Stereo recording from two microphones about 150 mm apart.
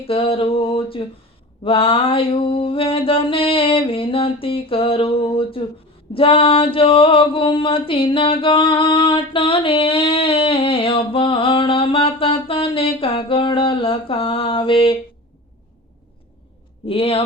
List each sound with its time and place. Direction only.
0.1 s mantra: 35° left (ahead or behind)
16.8 s mantra: 40° left (ahead or behind)